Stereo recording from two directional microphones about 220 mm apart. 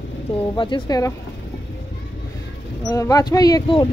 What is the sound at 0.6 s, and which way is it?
Speech, 20° left (ahead or behind).